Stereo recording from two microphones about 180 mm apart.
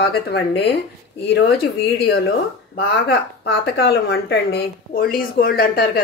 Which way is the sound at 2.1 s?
60° left (ahead or behind).